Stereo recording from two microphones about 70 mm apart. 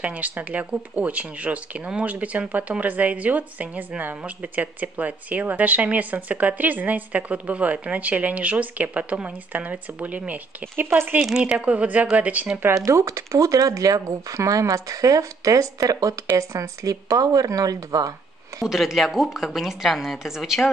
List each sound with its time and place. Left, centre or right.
0.0 s speech: right
11.1 s a woman's voice: centre
11.5 s speech: centre
12.6 s speech: right
18.6 s a woman's voice: centre